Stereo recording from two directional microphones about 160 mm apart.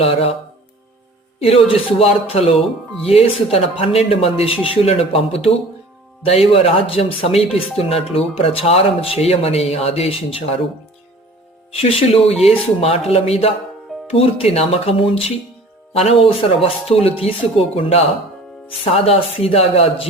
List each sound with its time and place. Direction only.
0.0 s speech: 40° left (ahead or behind)
1.4 s speech: 35° left (ahead or behind)
11.7 s speech: 35° left (ahead or behind)